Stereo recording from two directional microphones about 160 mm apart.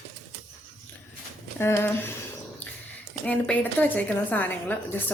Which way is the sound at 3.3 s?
10° left (ahead or behind).